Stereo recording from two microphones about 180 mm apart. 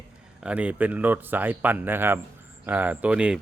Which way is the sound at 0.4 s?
5° right (ahead or behind).